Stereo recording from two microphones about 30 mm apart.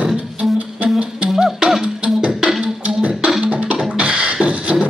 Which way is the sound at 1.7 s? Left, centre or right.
Centre.